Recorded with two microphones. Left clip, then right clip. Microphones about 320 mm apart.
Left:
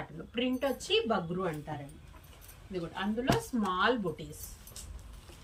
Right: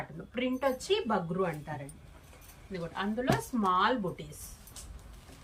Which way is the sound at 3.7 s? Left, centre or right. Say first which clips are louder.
Right 2 dB; centre.